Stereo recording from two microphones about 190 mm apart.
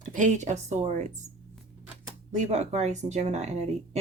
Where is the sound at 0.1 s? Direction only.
40° right (ahead or behind).